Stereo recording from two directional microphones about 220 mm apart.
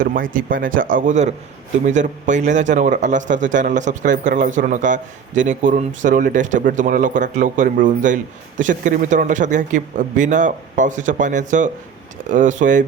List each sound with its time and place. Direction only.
0.0 s a man's voice: 40° right (ahead or behind)